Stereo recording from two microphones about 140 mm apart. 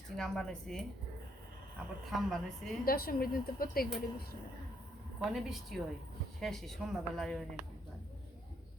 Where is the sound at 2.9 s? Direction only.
90° left.